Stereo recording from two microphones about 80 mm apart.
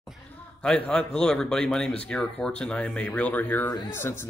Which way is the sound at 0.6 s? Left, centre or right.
Centre.